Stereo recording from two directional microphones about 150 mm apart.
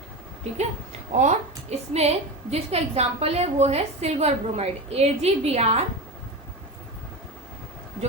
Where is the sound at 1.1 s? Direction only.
50° right (ahead or behind).